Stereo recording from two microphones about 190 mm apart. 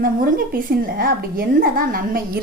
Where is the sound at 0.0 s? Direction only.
50° right (ahead or behind).